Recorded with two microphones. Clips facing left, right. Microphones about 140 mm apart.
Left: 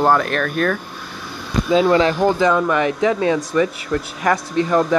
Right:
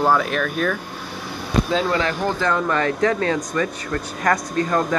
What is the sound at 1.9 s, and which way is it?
Speech, 25° left (ahead or behind).